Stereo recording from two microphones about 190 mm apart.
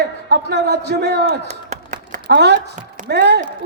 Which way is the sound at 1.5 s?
40° right (ahead or behind).